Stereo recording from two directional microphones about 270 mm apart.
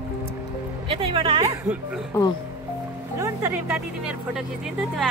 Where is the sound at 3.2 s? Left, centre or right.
Centre.